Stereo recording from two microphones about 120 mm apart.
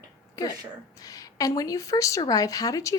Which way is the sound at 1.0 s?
30° left (ahead or behind).